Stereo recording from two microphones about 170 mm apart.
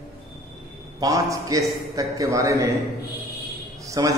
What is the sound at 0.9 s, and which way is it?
A man's voice, 20° right (ahead or behind).